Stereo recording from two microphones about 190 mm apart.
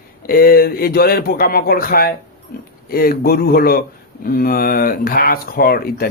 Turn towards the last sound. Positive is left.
turn(degrees=50)  # may be behind; listen again after turning